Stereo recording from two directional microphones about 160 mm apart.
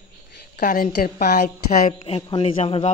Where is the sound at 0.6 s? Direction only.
60° left (ahead or behind).